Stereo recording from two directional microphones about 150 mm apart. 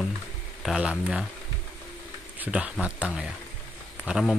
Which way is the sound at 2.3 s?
10° right (ahead or behind).